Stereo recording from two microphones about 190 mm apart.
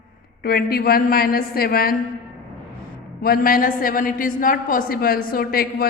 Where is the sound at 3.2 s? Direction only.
50° left (ahead or behind).